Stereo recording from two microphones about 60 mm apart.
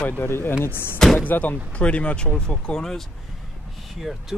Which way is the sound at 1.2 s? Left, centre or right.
Left.